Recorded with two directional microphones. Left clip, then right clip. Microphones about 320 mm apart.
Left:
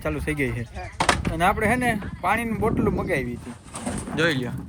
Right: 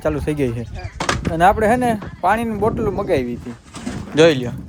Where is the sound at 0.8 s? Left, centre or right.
Left.